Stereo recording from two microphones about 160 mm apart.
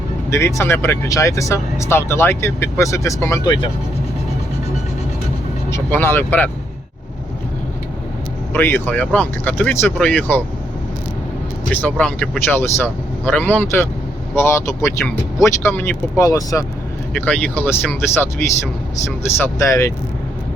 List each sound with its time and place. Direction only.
0.3 s speech: 15° left (ahead or behind)
3.4 s speech: 30° left (ahead or behind)
5.7 s speech: 15° left (ahead or behind)
8.5 s speech: 15° left (ahead or behind)
11.7 s speech: 10° left (ahead or behind)
17.2 s speech: 10° left (ahead or behind)
19.4 s speech: 20° left (ahead or behind)